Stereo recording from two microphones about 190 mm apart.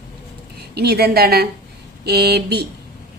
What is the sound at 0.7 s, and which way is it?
A woman's voice, 55° right (ahead or behind).